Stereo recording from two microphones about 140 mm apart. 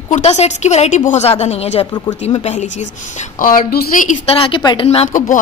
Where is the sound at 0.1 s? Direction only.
50° left (ahead or behind).